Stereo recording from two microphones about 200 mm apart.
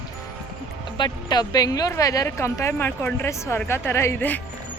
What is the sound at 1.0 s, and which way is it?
Speech, 20° left (ahead or behind).